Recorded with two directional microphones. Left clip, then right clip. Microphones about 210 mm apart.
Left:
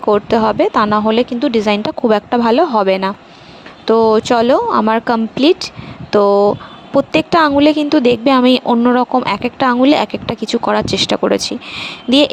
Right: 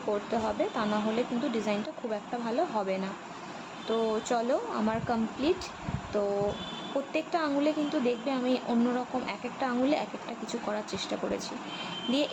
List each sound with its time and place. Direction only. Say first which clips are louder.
0.1 s a woman's voice: left 18 dB; 50° left (ahead or behind)